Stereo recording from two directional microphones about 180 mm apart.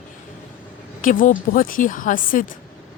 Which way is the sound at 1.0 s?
50° left (ahead or behind).